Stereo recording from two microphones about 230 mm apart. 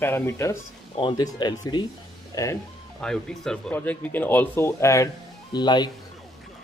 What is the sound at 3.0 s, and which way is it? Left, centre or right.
Speech, centre.